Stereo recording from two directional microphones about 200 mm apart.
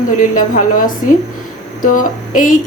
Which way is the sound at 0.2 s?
40° left (ahead or behind).